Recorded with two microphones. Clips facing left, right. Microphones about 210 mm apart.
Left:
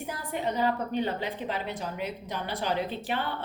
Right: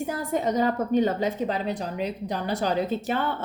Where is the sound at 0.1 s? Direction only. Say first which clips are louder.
Right 5 dB; 45° right (ahead or behind).